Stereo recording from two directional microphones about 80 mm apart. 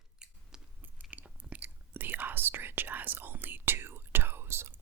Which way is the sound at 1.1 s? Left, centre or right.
Centre.